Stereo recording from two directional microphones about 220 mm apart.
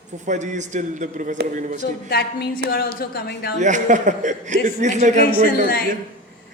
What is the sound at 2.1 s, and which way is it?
A woman's voice, 45° left (ahead or behind).